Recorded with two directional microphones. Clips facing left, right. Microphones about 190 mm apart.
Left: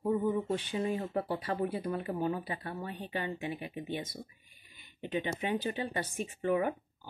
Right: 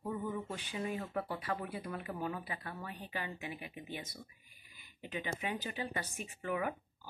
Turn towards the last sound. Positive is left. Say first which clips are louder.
# left 7 dB
turn(degrees=30)  # may be behind; listen again after turning